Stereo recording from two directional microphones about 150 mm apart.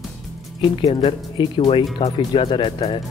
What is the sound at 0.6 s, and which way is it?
Speech, 35° left (ahead or behind).